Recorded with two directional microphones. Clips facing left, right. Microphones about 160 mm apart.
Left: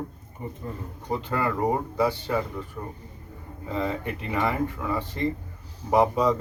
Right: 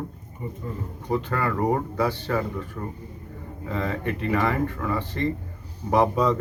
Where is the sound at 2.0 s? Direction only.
15° left (ahead or behind).